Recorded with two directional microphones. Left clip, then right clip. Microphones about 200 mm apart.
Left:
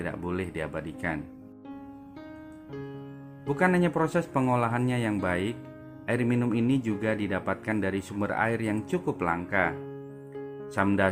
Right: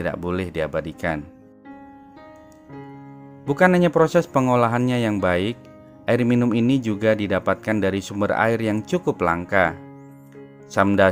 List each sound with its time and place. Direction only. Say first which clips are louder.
0.0 s speech: right 7 dB; 50° right (ahead or behind)
3.4 s speech: right 8 dB; 50° right (ahead or behind)